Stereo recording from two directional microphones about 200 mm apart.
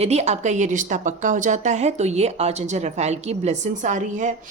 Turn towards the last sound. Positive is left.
turn(degrees=-40)  # may be behind; listen again after turning